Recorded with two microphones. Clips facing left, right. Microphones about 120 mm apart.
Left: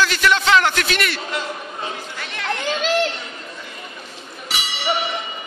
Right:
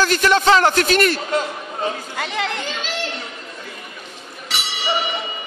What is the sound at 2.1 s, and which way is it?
Chatter, 90° right.